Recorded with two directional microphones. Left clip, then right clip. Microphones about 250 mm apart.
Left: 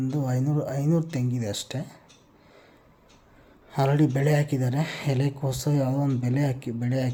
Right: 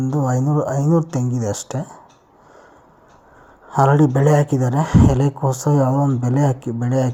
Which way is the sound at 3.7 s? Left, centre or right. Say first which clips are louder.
Right 9 dB; centre.